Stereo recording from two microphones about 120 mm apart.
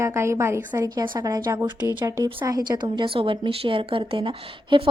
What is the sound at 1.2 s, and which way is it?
A woman's voice, 30° right (ahead or behind).